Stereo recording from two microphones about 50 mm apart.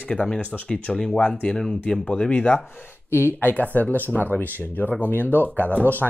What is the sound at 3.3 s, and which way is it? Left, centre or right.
Speech, left.